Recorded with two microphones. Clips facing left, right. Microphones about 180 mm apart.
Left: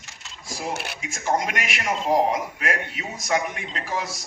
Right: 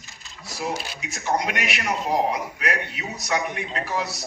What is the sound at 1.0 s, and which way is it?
A man's voice, 45° left (ahead or behind).